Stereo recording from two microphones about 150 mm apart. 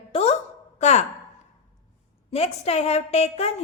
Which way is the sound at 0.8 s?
50° left (ahead or behind).